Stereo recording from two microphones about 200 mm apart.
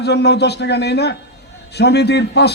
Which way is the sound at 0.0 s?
55° left (ahead or behind).